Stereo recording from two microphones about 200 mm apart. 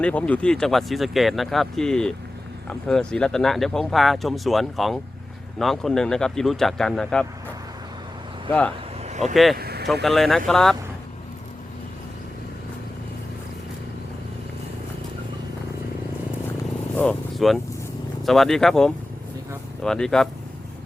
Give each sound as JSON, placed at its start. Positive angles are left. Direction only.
{"t": 0.0, "sound": "speech", "side_deg": 5}
{"t": 9.0, "sound": "vehicle", "side_deg": -35}
{"t": 9.3, "sound": "speech", "side_deg": 0}
{"t": 9.6, "sound": "vehicle", "side_deg": -50}
{"t": 9.8, "sound": "speech", "side_deg": 0}
{"t": 17.0, "sound": "vehicle", "side_deg": 5}
{"t": 18.2, "sound": "speech", "side_deg": 0}